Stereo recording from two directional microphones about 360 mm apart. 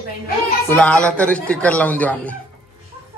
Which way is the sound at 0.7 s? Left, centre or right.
Centre.